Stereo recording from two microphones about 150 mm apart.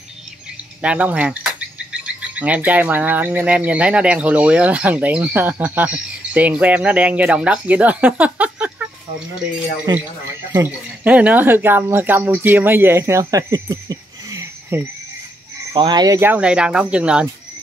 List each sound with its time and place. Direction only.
0.8 s speech: 10° right (ahead or behind)
9.9 s speech: 25° right (ahead or behind)
10.5 s speech: 15° right (ahead or behind)
15.7 s speech: 30° right (ahead or behind)
16.2 s speech: 10° right (ahead or behind)